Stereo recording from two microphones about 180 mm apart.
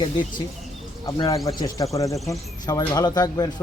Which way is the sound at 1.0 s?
20° left (ahead or behind).